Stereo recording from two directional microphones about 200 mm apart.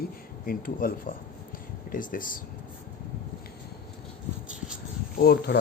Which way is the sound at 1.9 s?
45° left (ahead or behind).